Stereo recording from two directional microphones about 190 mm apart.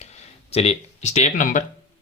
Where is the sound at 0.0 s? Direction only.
35° left (ahead or behind).